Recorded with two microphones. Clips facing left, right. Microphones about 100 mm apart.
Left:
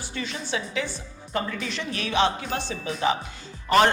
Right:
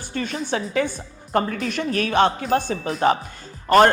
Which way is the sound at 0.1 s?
50° right (ahead or behind).